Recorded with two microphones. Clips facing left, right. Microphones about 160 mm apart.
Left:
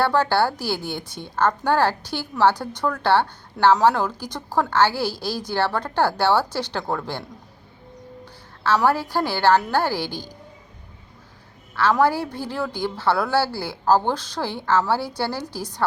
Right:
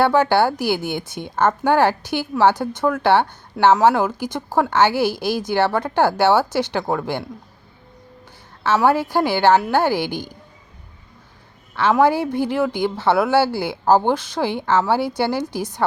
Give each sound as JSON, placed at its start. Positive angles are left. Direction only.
{"t": 0.0, "sound": "a woman's voice", "side_deg": -15}
{"t": 8.6, "sound": "a woman's voice", "side_deg": -20}
{"t": 11.7, "sound": "a woman's voice", "side_deg": -20}